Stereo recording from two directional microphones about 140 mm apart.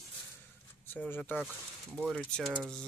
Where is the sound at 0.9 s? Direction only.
15° left (ahead or behind).